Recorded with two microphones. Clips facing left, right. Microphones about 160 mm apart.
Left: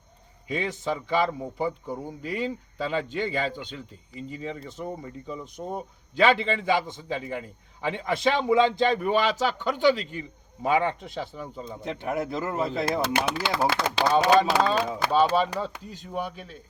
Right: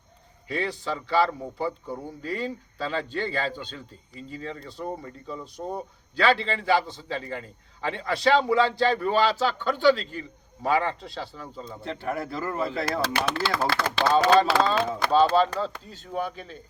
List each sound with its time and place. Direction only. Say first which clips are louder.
0.4 s a man's voice: left 1 dB; 15° left (ahead or behind)